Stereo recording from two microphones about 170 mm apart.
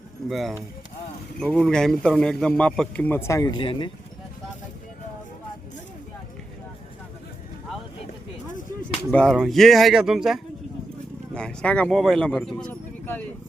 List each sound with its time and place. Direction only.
0.3 s a man's voice: centre (ahead or behind); by 3.9 s 30° left (ahead or behind)
9.0 s speech: 5° left (ahead or behind)